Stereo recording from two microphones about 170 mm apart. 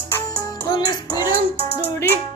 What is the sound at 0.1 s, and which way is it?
Music, 15° left (ahead or behind).